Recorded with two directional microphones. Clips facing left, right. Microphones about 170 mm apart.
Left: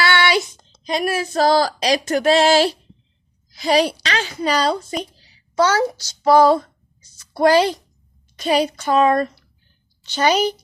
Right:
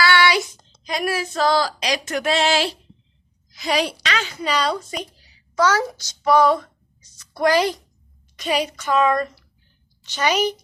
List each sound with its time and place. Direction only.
0.0 s a sound: 25° left (ahead or behind)
0.9 s speech: 25° left (ahead or behind)
1.3 s a woman's voice: 40° left (ahead or behind)